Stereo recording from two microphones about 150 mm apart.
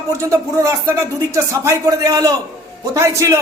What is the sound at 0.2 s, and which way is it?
Speech, 20° right (ahead or behind).